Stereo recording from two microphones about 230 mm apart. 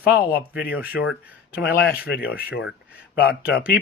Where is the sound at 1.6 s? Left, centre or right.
Left.